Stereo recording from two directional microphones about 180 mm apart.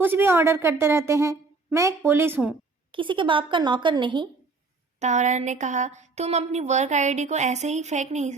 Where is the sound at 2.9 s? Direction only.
30° right (ahead or behind).